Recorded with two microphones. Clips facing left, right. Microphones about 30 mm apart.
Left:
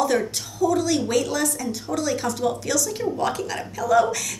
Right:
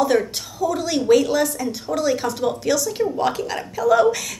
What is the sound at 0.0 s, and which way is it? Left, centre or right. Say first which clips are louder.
A woman's voice: right 3 dB; right.